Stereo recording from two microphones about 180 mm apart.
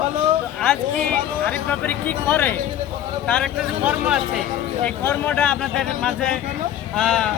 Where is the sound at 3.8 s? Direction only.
5° right (ahead or behind).